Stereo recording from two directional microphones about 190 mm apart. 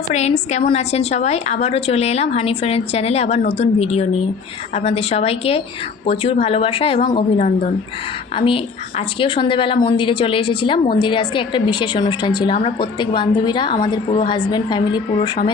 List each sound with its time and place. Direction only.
0.1 s a woman's voice: 35° left (ahead or behind)